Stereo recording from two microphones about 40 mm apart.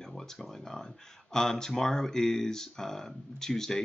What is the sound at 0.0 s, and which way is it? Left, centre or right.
Speech, centre.